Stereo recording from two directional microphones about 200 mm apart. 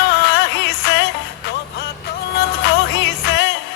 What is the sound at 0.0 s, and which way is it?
Music, 60° left (ahead or behind).